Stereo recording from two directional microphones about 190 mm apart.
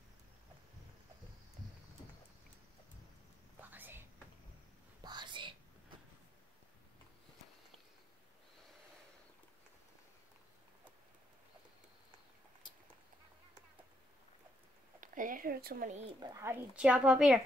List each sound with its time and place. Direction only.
3.7 s whispering: 10° right (ahead or behind)
5.0 s whispering: 25° right (ahead or behind)
15.0 s speech: 45° right (ahead or behind)
16.2 s speech: 20° right (ahead or behind)